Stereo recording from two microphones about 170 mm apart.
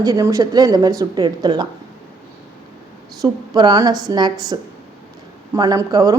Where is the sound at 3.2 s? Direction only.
25° right (ahead or behind).